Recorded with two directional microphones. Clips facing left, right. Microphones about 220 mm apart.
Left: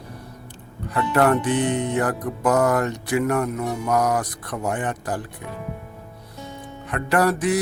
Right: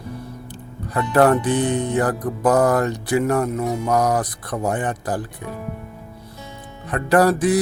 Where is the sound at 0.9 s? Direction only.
35° right (ahead or behind).